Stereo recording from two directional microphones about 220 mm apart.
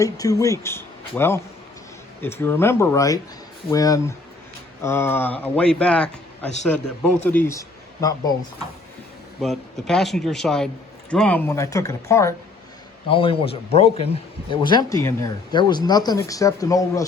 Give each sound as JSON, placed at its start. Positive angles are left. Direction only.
{"t": 0.0, "sound": "speech", "side_deg": 15}
{"t": 9.4, "sound": "speech", "side_deg": 0}
{"t": 13.1, "sound": "a man's voice", "side_deg": 25}